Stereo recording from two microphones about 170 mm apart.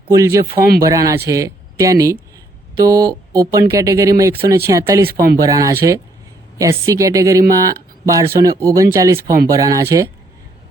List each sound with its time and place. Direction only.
0.1 s speech: 20° right (ahead or behind)